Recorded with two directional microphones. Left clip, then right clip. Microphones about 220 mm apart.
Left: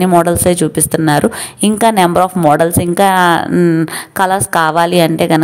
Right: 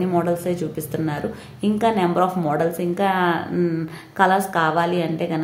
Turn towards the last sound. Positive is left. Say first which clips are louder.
# left 12 dB
turn(degrees=50)  # may be behind; listen again after turning